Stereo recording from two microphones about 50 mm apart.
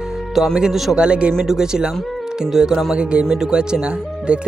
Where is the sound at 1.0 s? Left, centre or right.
Right.